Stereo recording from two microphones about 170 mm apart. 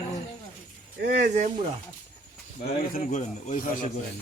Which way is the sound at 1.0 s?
55° right (ahead or behind).